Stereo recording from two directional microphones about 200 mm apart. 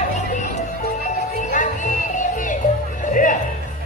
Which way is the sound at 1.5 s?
40° left (ahead or behind).